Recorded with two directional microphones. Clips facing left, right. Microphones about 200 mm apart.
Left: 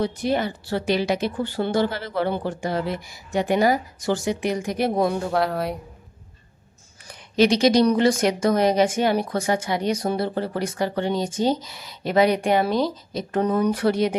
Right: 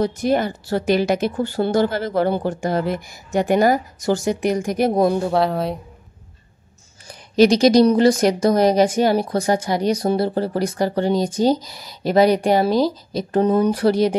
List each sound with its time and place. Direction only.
0.0 s a woman's voice: 45° right (ahead or behind)
5.3 s speech: 25° right (ahead or behind)
7.1 s a woman's voice: 40° right (ahead or behind)